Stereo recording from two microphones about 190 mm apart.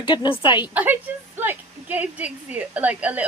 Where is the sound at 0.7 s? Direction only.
10° right (ahead or behind).